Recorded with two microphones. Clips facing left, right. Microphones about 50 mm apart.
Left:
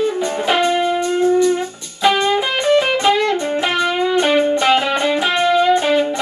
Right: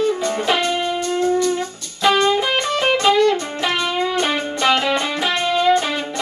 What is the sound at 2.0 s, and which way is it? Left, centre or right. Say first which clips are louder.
Music: left 1 dB; centre.